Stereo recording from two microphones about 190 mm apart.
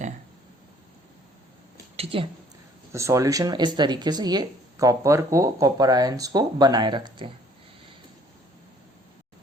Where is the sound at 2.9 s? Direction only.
15° right (ahead or behind).